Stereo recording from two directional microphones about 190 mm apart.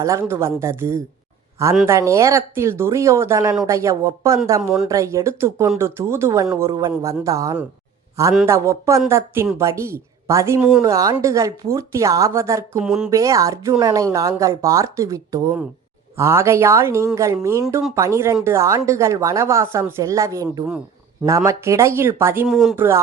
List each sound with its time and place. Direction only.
0.0 s speech: 15° right (ahead or behind)
10.8 s speech: 15° right (ahead or behind)
12.8 s speech: 5° right (ahead or behind)
13.1 s speech: 15° right (ahead or behind)